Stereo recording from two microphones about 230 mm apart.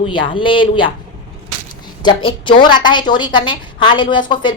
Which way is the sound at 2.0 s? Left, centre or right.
Left.